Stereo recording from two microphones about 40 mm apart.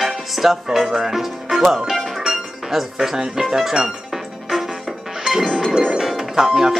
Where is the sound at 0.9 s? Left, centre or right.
Centre.